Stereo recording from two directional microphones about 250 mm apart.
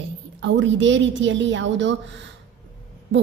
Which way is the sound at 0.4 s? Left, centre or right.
Right.